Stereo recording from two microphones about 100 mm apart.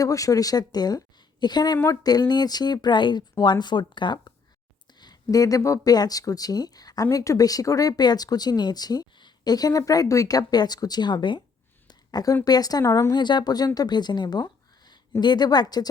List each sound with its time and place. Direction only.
0.0 s speech: 35° left (ahead or behind); by 11.4 s 50° left (ahead or behind)
11.9 s a sound: 40° left (ahead or behind)
12.5 s speech: 40° left (ahead or behind)
13.1 s speech: 50° left (ahead or behind)